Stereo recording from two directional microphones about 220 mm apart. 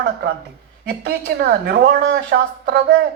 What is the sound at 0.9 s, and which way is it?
Speech, 45° right (ahead or behind).